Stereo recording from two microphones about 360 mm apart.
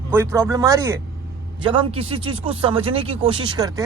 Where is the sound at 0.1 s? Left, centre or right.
Centre.